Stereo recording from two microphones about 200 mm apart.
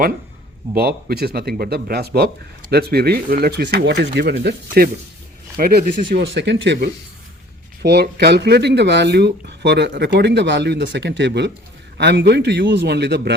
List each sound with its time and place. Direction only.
0.7 s speech: 50° right (ahead or behind)
6.1 s speech: 60° right (ahead or behind)